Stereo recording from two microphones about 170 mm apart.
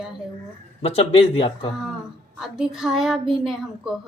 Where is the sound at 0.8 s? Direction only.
35° left (ahead or behind).